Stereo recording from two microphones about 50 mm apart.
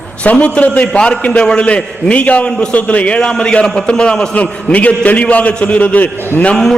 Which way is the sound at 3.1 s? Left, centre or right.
Centre.